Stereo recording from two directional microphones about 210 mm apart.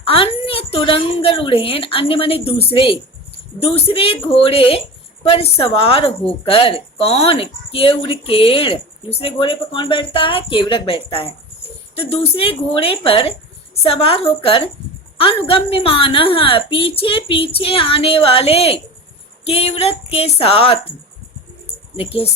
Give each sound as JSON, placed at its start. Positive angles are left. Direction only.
{"t": 0.0, "sound": "a woman's voice", "side_deg": 25}
{"t": 21.9, "sound": "a woman's voice", "side_deg": 25}